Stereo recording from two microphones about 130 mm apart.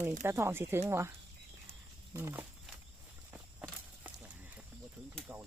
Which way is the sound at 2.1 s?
15° right (ahead or behind).